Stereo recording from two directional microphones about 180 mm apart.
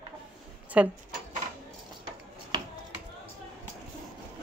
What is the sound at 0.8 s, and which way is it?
Speech, 5° right (ahead or behind).